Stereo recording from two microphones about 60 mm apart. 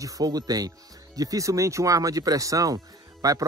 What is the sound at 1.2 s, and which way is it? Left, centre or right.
Speech, right.